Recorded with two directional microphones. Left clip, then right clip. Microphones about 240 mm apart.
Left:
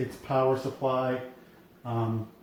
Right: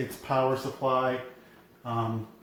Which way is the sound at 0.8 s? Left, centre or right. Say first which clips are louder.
Right 2 dB; centre.